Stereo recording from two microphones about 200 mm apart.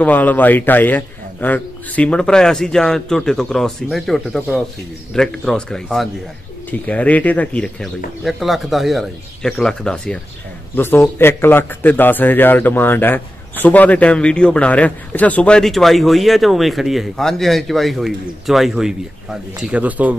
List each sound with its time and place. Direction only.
0.0 s a man's voice: 10° left (ahead or behind); by 20.2 s 10° right (ahead or behind)